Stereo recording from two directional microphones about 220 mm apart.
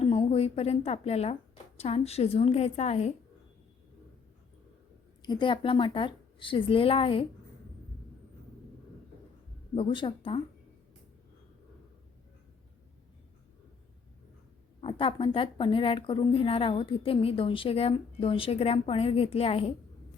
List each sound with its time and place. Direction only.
0.0 s a woman's voice: 25° left (ahead or behind)
5.2 s speech: 20° left (ahead or behind)
9.7 s speech: 25° left (ahead or behind)
14.8 s speech: 25° left (ahead or behind)